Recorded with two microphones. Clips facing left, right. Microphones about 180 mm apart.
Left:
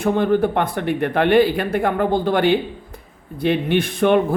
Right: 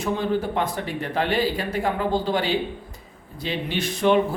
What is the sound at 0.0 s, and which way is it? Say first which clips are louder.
A man's voice: left 7 dB; 55° left (ahead or behind).